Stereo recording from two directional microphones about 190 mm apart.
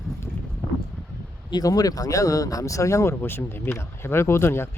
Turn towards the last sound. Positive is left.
turn(degrees=15)  # may be behind; listen again after turning